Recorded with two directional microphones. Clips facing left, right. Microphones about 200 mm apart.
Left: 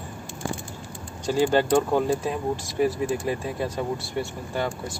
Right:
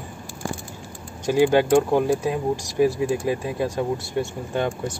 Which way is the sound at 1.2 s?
15° right (ahead or behind).